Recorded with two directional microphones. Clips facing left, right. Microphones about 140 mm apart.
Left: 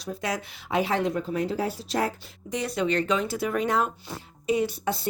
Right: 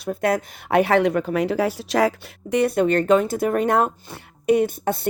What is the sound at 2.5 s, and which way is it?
Speech, 55° right (ahead or behind).